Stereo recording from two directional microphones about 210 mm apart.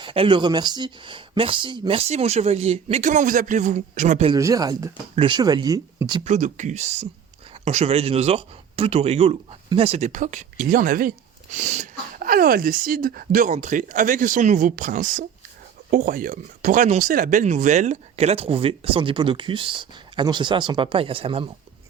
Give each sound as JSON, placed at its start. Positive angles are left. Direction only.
{"t": 0.0, "sound": "speech", "side_deg": -25}
{"t": 4.3, "sound": "speech", "side_deg": -15}
{"t": 6.2, "sound": "speech", "side_deg": -35}